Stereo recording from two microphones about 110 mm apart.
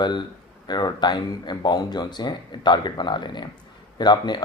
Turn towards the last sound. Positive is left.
turn(degrees=40)  # may be behind; listen again after turning